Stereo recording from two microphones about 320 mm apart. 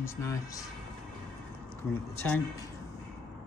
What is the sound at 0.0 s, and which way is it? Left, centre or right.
Speech, centre.